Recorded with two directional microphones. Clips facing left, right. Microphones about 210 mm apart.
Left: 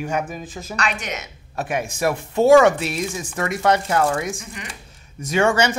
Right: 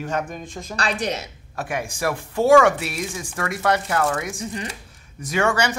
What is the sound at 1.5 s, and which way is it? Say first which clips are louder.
Speech: left 3 dB; 20° left (ahead or behind).